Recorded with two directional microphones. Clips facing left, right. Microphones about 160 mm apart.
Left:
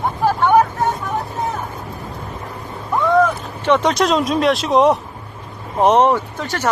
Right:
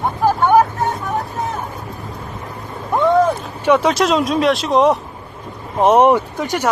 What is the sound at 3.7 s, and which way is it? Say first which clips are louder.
Speech: right 1 dB; 5° right (ahead or behind).